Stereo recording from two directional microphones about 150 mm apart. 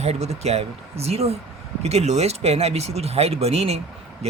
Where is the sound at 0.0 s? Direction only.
45° right (ahead or behind).